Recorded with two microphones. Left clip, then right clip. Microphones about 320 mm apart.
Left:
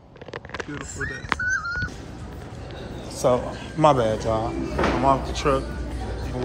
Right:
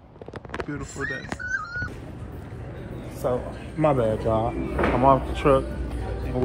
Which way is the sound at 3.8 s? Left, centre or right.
Centre.